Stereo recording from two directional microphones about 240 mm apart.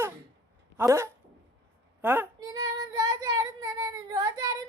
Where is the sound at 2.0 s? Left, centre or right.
Centre.